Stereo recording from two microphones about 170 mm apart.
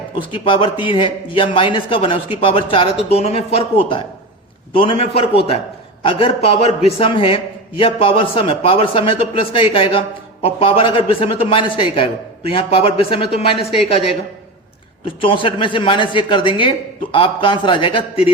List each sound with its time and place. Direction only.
0.2 s a man's voice: 30° left (ahead or behind)